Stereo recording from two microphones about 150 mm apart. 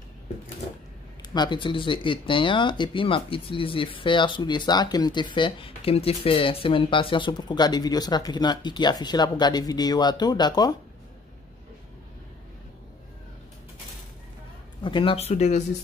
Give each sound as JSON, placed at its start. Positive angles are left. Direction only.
{"t": 1.3, "sound": "speech", "side_deg": 30}
{"t": 14.8, "sound": "speech", "side_deg": 35}